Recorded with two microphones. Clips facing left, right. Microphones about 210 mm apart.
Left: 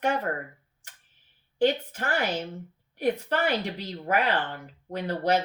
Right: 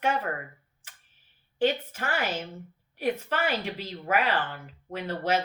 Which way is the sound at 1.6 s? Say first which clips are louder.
Left 2 dB; 40° left (ahead or behind).